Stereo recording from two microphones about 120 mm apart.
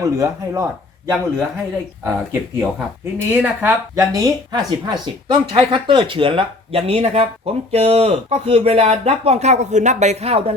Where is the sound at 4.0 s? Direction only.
30° right (ahead or behind).